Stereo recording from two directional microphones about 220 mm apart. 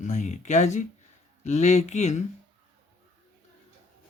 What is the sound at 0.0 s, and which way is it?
Speech, 35° left (ahead or behind).